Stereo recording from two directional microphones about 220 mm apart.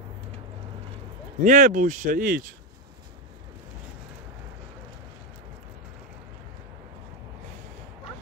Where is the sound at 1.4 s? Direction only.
35° right (ahead or behind).